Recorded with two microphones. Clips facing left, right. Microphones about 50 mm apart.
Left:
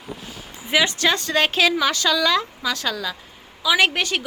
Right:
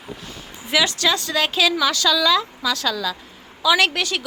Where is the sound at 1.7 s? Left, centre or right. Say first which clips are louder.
Right 1 dB; left.